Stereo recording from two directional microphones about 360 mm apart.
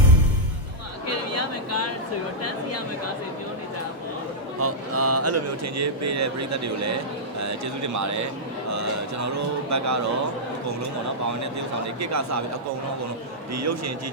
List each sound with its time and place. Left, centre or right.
1.0 s a sound: left
4.6 s speech: right
11.9 s speech: right
13.5 s speech: right